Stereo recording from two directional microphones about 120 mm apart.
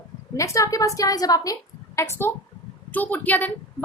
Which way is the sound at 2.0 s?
20° left (ahead or behind).